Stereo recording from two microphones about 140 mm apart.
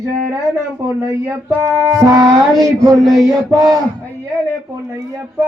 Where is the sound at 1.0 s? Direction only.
20° right (ahead or behind).